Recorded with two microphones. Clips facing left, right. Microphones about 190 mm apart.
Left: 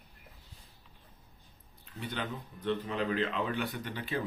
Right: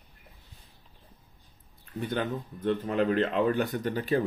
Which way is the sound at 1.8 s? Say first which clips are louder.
Right 7 dB; 50° right (ahead or behind).